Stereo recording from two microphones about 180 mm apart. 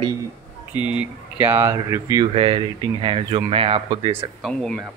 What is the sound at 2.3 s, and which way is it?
Speech, 30° right (ahead or behind).